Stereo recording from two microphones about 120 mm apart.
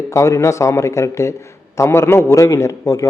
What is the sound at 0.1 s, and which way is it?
A man's voice, 25° left (ahead or behind).